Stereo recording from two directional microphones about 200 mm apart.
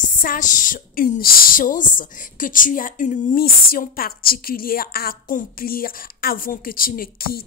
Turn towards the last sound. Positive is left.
turn(degrees=50)  # may be behind; listen again after turning